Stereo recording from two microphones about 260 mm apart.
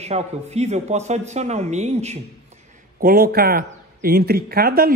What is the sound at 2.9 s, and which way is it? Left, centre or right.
A man's voice, right.